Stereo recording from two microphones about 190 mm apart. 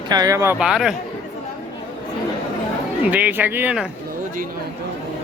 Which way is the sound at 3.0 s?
10° right (ahead or behind).